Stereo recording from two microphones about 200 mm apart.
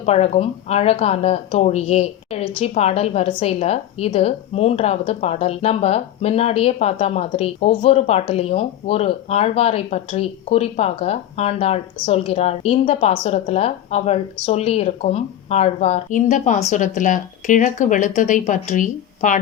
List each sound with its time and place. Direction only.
0.0 s a woman's voice: 30° left (ahead or behind)